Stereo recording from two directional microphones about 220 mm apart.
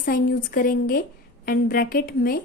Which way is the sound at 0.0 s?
40° left (ahead or behind).